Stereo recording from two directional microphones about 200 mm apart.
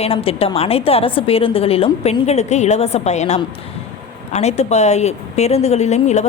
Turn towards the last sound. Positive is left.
turn(degrees=35)  # may be behind; listen again after turning